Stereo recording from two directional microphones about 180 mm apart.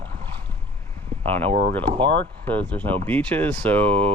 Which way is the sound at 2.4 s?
10° left (ahead or behind).